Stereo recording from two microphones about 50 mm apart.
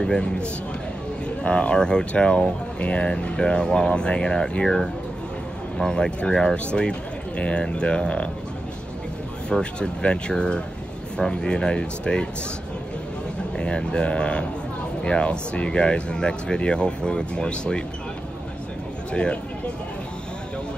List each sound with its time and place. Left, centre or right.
0.0 s speech: centre
9.5 s speech: centre
13.6 s speech: centre
19.1 s speech: left